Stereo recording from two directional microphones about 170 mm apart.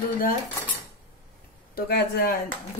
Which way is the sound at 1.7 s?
65° left (ahead or behind).